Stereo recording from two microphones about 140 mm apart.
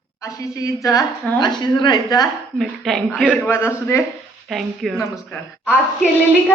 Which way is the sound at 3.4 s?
20° left (ahead or behind).